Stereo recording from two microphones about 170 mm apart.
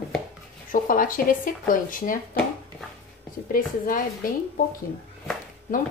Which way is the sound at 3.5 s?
55° left (ahead or behind).